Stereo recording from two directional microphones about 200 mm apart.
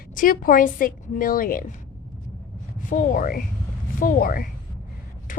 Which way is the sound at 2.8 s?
40° left (ahead or behind).